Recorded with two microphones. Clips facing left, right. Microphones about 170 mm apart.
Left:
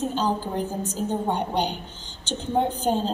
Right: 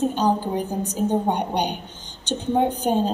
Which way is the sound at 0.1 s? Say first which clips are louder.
Right 4 dB; 15° right (ahead or behind).